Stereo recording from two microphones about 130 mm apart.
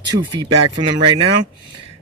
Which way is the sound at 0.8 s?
40° right (ahead or behind).